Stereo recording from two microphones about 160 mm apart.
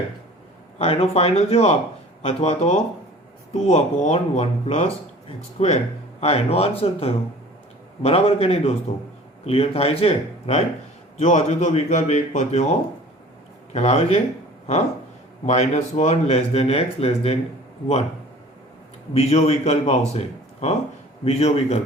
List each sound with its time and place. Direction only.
0.8 s speech: 40° left (ahead or behind)
13.7 s speech: 40° left (ahead or behind)
15.4 s speech: 45° left (ahead or behind)
19.1 s speech: 40° left (ahead or behind)